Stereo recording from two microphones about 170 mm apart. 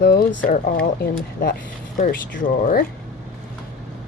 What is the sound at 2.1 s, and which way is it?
Speech, 55° left (ahead or behind).